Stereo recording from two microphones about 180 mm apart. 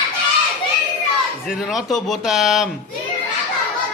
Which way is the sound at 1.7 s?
Centre (ahead or behind).